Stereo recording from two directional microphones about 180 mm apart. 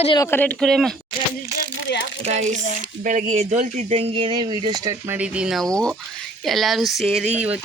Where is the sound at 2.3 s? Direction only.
40° right (ahead or behind).